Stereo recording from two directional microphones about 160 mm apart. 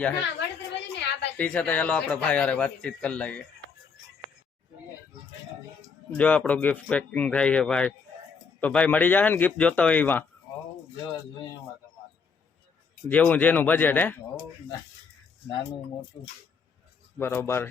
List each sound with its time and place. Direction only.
0.3 s a sound: 90° left
1.4 s speech: 10° left (ahead or behind)
6.1 s speech: 10° left (ahead or behind)
13.1 s speech: 10° left (ahead or behind)
16.1 s speech: 25° left (ahead or behind)
17.2 s speech: 15° left (ahead or behind)